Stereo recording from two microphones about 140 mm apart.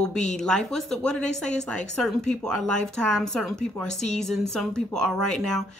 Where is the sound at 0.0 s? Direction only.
5° left (ahead or behind).